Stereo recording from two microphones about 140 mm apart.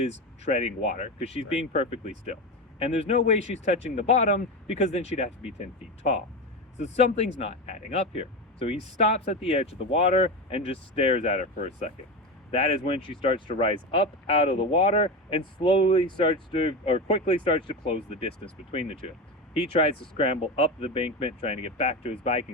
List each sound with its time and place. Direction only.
0.0 s speech: 50° left (ahead or behind)
11.5 s speech: 60° left (ahead or behind)
12.5 s speech: 45° left (ahead or behind)
19.7 s speech: 45° left (ahead or behind)